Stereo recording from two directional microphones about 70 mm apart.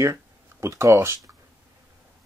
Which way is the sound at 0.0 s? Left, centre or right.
Right.